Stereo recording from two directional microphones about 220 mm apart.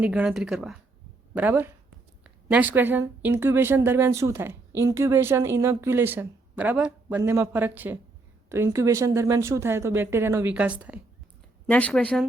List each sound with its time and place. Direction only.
0.0 s a woman's voice: 5° right (ahead or behind)
11.6 s speech: 5° left (ahead or behind)